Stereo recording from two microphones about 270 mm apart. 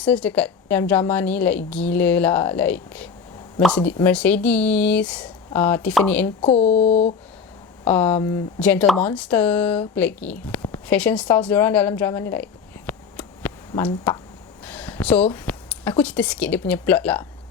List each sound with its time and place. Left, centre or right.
0.0 s a woman's voice: centre
6.4 s speech: left
7.9 s a woman's voice: centre